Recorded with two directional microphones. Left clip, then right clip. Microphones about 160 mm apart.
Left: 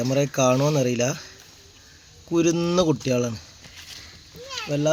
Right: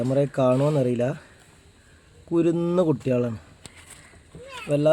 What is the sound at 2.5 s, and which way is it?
Speech, centre (ahead or behind).